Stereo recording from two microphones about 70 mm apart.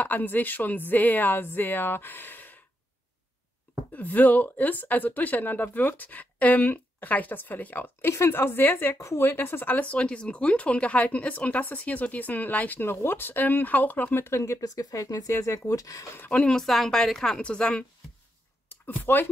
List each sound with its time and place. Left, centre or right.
0.0 s speech: left
3.9 s speech: left
8.1 s a woman's voice: left
8.9 s speech: left
12.9 s speech: left
14.4 s speech: left
16.3 s a woman's voice: centre
18.7 s speech: left